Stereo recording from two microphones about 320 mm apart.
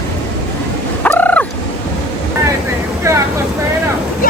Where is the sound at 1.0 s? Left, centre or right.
Centre.